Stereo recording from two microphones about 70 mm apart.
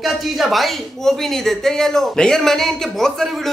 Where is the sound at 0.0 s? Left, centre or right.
Centre.